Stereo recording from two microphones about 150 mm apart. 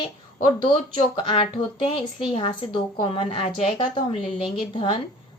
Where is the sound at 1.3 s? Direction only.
35° left (ahead or behind).